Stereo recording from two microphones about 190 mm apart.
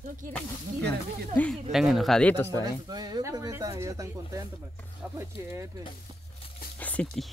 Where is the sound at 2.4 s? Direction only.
20° right (ahead or behind).